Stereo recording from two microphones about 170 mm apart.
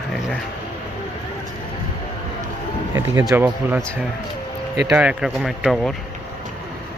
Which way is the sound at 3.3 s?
10° right (ahead or behind).